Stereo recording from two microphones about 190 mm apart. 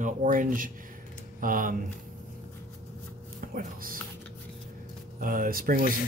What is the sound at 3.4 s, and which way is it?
Speech, 50° right (ahead or behind).